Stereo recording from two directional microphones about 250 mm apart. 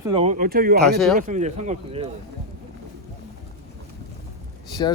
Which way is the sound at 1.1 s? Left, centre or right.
Right.